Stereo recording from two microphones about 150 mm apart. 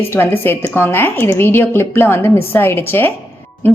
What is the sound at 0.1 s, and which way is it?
A woman's voice, 15° left (ahead or behind).